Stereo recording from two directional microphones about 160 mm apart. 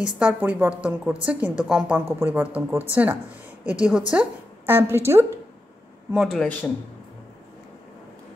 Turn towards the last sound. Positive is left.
turn(degrees=10)  # may be behind; listen again after turning